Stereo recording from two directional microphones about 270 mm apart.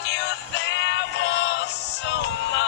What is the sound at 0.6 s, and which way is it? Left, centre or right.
Male singing, left.